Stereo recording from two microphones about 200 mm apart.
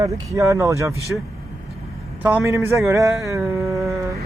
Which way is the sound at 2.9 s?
15° right (ahead or behind).